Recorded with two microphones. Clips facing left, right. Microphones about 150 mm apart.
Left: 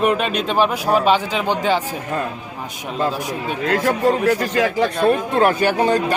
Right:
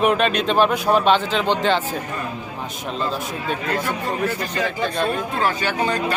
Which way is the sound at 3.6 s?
90° left.